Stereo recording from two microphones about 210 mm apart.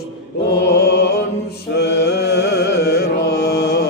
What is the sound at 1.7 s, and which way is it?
Mantra, 50° left (ahead or behind).